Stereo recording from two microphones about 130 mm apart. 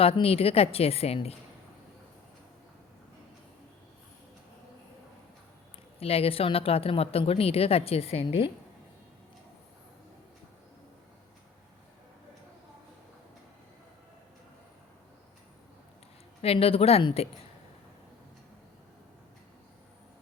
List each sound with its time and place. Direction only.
0.0 s speech: 50° left (ahead or behind)
6.0 s speech: 50° left (ahead or behind)
16.4 s speech: 50° left (ahead or behind)